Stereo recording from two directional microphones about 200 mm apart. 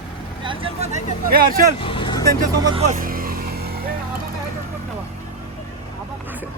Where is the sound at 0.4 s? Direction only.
25° right (ahead or behind).